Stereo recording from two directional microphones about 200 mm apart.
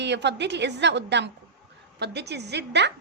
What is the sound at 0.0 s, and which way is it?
A woman's voice, 60° right (ahead or behind).